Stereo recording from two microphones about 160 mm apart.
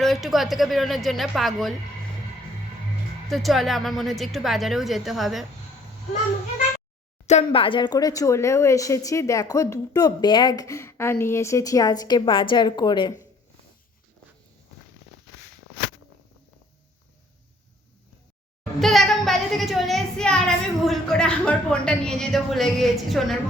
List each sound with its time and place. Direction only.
0.0 s a woman's voice: centre (ahead or behind)
3.2 s a woman's voice: centre (ahead or behind)
7.3 s speech: 40° left (ahead or behind)
18.8 s a woman's voice: centre (ahead or behind)